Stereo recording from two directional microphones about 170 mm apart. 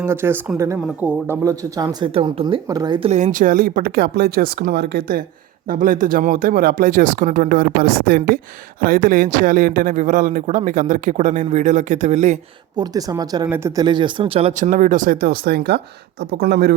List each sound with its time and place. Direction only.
0.0 s speech: 15° right (ahead or behind)
3.1 s speech: 45° right (ahead or behind); by 5.2 s 70° right (ahead or behind)
5.6 s a man's voice: 55° right (ahead or behind)
12.7 s speech: 25° right (ahead or behind)
14.6 s speech: 50° right (ahead or behind); by 16.7 s 70° right (ahead or behind)